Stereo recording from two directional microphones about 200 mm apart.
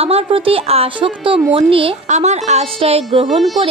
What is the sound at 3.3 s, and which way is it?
Speech, centre (ahead or behind).